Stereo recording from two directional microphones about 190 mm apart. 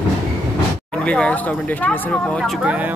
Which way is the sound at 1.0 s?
5° left (ahead or behind).